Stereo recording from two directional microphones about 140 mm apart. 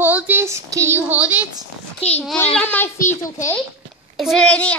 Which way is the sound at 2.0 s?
45° left (ahead or behind).